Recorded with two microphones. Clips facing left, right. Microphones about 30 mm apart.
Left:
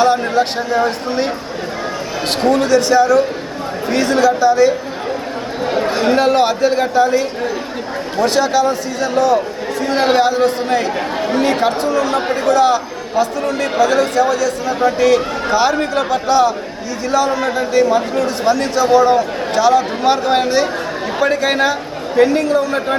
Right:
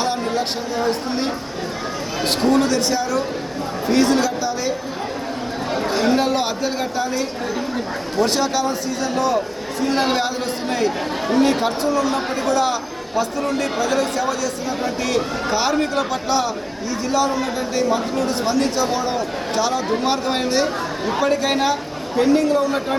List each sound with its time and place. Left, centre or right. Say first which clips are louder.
0.0 s speech: left 8 dB; centre
2.2 s a man's voice: left 2 dB; centre
6.1 s a man's voice: left 7 dB; centre
8.3 s a man's voice: left 6 dB; centre
14.2 s speech: left 7 dB; centre
14.8 s a man's voice: left 10 dB; centre
17.7 s a man's voice: left 6 dB; centre